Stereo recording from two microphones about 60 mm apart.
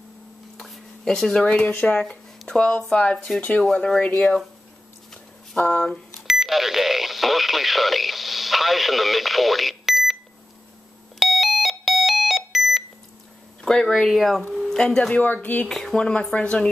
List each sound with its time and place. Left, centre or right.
0.6 s speech: centre
3.3 s speech: left
5.6 s speech: left
6.1 s speech: centre
11.1 s a sound: centre
13.6 s speech: centre
14.0 s speech: centre
14.5 s a sound: centre
14.8 s speech: centre
15.2 s speech: left
15.6 s speech: centre
16.0 s speech: centre